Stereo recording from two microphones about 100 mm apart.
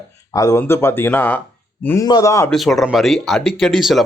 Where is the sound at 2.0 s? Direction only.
35° left (ahead or behind).